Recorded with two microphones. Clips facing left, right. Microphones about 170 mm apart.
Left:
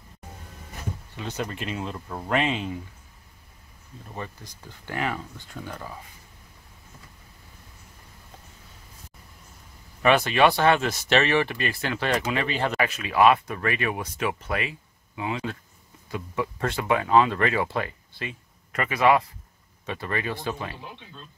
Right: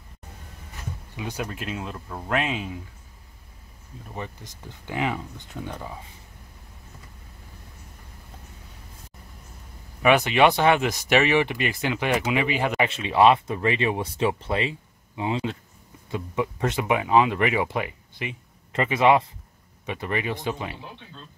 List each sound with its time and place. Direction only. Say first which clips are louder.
1.1 s speech: right 1 dB; 10° right (ahead or behind)
4.1 s speech: right 1 dB; 15° right (ahead or behind)
10.0 s speech: right 1 dB; 15° right (ahead or behind)
12.8 s speech: right 1 dB; 25° right (ahead or behind)